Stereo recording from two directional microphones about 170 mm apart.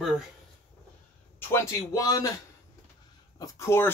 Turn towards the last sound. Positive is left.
turn(degrees=15)  # may be behind; listen again after turning